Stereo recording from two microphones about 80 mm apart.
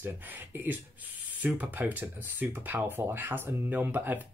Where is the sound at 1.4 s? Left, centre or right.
Right.